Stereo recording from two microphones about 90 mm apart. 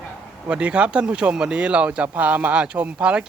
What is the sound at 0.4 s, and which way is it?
Speech, 15° right (ahead or behind).